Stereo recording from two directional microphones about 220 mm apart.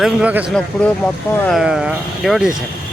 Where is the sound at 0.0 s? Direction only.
5° right (ahead or behind).